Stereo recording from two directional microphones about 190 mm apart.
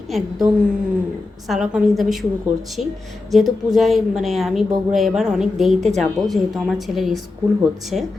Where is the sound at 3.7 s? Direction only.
Centre (ahead or behind).